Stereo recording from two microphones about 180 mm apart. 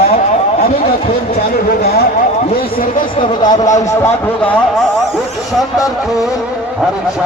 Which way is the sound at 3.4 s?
25° left (ahead or behind).